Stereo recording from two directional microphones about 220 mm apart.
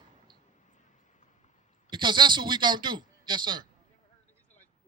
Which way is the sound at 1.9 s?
20° right (ahead or behind).